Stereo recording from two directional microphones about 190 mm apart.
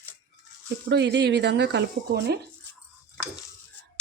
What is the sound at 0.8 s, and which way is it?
Speech, 65° right (ahead or behind).